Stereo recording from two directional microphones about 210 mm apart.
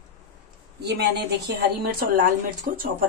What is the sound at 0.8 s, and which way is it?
Speech, 50° right (ahead or behind).